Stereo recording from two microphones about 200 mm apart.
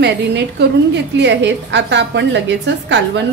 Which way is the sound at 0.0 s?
60° right (ahead or behind).